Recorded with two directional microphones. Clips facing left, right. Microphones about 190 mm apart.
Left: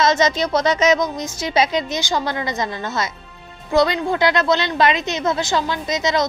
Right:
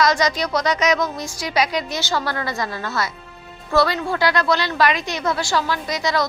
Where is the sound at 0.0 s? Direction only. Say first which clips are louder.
Left 2 dB; 25° left (ahead or behind).